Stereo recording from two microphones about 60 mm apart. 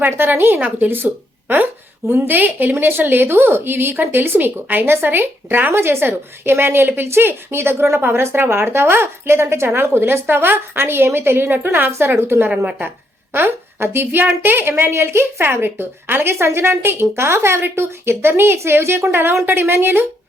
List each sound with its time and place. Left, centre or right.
0.0 s speech: right
11.9 s speech: right
12.5 s speech: centre
13.3 s speech: right